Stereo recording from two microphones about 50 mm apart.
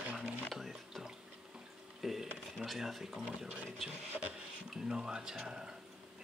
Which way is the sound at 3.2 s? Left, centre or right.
Centre.